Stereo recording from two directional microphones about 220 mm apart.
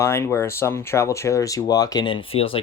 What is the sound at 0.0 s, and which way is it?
Speech, 10° left (ahead or behind).